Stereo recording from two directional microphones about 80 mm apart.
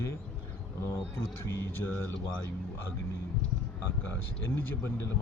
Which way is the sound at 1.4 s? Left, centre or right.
Left.